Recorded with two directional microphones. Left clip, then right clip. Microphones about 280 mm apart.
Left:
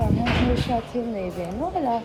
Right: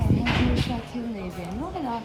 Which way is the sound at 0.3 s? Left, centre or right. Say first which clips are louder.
Left 2 dB; centre.